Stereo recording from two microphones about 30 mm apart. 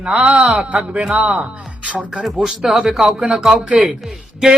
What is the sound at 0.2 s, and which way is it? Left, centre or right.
A man's voice, right.